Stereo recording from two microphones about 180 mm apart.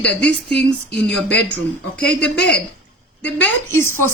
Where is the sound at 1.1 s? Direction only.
5° left (ahead or behind).